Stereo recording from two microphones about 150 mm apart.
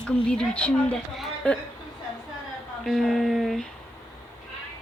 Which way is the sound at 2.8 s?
Centre (ahead or behind).